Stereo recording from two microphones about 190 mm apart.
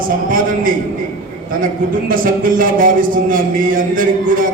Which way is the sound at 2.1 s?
45° right (ahead or behind).